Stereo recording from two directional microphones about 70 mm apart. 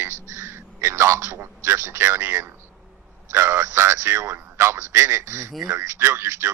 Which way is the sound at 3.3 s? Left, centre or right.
Right.